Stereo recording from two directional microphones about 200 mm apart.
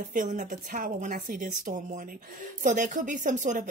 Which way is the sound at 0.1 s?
40° right (ahead or behind).